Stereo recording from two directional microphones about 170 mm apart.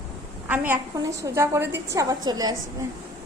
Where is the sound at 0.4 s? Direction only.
10° right (ahead or behind).